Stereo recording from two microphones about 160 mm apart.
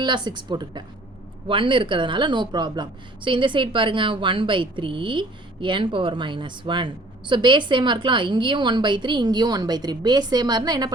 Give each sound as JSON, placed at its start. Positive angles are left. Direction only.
{"t": 0.0, "sound": "a woman's voice", "side_deg": -30}